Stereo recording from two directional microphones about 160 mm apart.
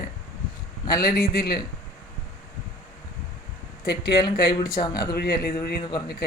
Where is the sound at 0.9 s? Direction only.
80° left.